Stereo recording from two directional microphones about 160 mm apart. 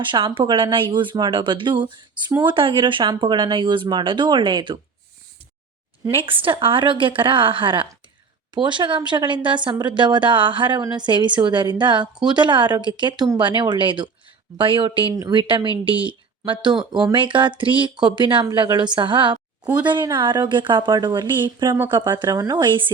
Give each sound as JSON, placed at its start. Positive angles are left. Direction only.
{"t": 0.1, "sound": "a woman's voice", "side_deg": -30}
{"t": 6.1, "sound": "a woman's voice", "side_deg": -30}